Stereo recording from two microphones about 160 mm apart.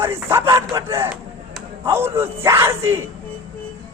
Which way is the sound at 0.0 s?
15° right (ahead or behind).